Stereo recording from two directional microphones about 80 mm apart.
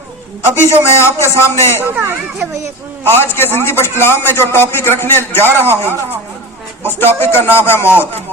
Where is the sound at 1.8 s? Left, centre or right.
Right.